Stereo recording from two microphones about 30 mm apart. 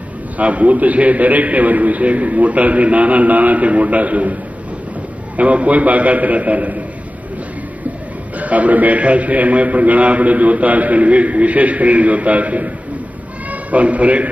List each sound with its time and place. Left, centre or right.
0.4 s a man's voice: right
5.4 s a man's voice: right
8.4 s a man's voice: right